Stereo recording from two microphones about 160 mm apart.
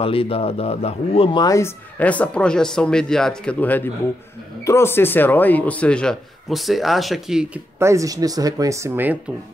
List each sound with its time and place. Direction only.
0.0 s speech: 35° left (ahead or behind); by 7.6 s 5° right (ahead or behind)
7.8 s speech: 20° right (ahead or behind)